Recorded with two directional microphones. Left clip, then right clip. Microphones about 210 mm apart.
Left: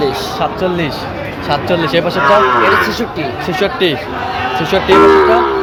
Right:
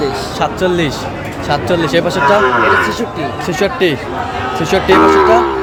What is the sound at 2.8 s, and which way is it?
Speech, 40° left (ahead or behind).